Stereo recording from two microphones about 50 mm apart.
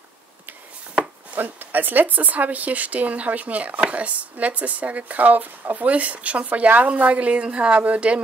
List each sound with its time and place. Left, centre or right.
1.3 s speech: right